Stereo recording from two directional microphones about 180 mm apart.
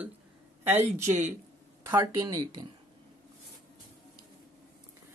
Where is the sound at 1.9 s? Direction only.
15° right (ahead or behind).